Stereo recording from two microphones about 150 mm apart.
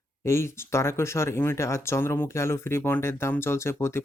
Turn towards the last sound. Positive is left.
turn(degrees=15)  # may be behind; listen again after turning